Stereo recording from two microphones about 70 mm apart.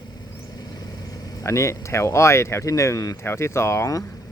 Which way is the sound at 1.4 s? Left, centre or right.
Left.